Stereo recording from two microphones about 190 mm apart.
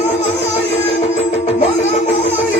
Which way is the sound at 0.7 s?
35° left (ahead or behind).